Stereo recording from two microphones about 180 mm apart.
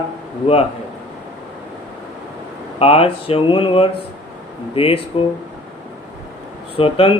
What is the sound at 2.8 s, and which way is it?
Speech, 35° left (ahead or behind).